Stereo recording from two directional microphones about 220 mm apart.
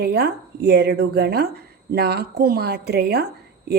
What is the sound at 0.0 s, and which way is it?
A woman's voice, 50° right (ahead or behind).